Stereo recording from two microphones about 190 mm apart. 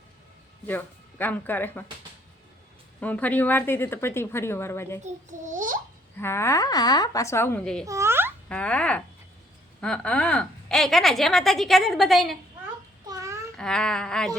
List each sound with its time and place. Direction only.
0.7 s a woman's voice: 10° left (ahead or behind)
3.0 s a woman's voice: 10° left (ahead or behind)
5.0 s a child's voice: 40° right (ahead or behind)
6.1 s a woman's voice: 15° left (ahead or behind)
7.9 s a sound: 15° right (ahead or behind)
8.4 s a woman's voice: 5° left (ahead or behind)
13.1 s babbling: 15° right (ahead or behind)
13.6 s a woman's voice: 5° left (ahead or behind)